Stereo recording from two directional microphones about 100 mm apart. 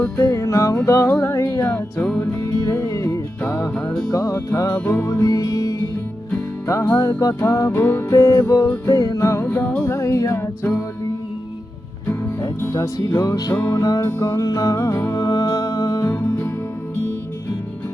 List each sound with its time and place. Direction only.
0.0 s music: 30° left (ahead or behind)
7.8 s music: 20° left (ahead or behind)
9.5 s music: 15° left (ahead or behind)
9.9 s music: 30° left (ahead or behind)
12.7 s music: 40° left (ahead or behind)
16.0 s music: 20° left (ahead or behind)